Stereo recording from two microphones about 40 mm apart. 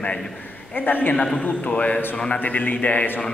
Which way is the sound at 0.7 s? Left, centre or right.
Left.